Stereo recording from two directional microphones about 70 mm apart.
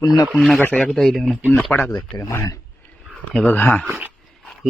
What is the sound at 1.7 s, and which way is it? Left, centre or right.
Speech, left.